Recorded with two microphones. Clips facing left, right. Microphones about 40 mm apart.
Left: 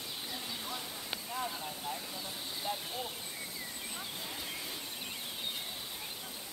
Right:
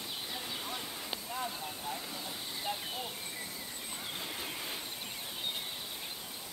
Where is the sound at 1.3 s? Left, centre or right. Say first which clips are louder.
Left 1 dB; centre.